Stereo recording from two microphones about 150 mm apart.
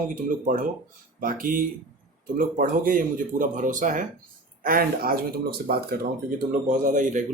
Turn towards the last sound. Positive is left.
turn(degrees=-55)  # may be behind; listen again after turning